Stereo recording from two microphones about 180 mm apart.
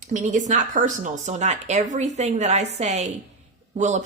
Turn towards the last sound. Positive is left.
turn(degrees=-40)  # may be behind; listen again after turning